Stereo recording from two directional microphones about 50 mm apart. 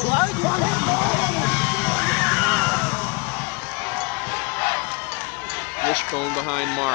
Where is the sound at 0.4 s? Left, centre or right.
Left.